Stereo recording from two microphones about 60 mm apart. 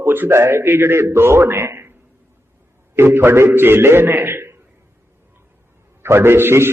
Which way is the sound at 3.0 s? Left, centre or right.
Right.